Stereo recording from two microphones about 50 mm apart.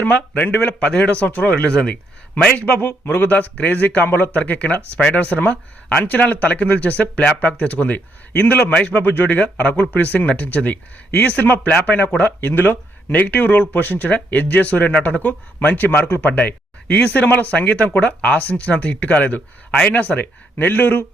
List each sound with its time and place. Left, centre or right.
0.0 s a man's voice: left